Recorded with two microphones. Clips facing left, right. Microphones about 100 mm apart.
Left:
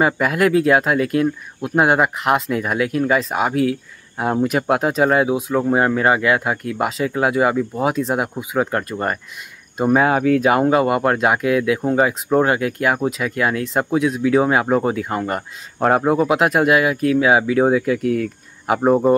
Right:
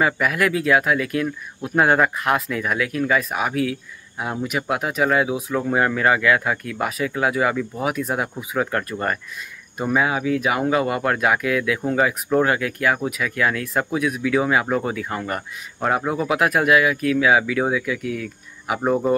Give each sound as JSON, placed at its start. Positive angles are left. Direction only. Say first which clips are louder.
{"t": 0.0, "sound": "speech", "louder": "left 3 dB", "side_deg": 25}
{"t": 1.8, "sound": "speech", "louder": "left 1 dB", "side_deg": 20}
{"t": 4.2, "sound": "speech", "louder": "left 7 dB", "side_deg": 40}
{"t": 9.8, "sound": "speech", "louder": "left 5 dB", "side_deg": 45}
{"t": 10.4, "sound": "speech", "louder": "left 5 dB", "side_deg": 35}
{"t": 16.0, "sound": "speech", "louder": "left 7 dB", "side_deg": 35}
{"t": 16.3, "sound": "speech", "louder": "left 3 dB", "side_deg": 25}
{"t": 18.8, "sound": "speech", "louder": "left 5 dB", "side_deg": 25}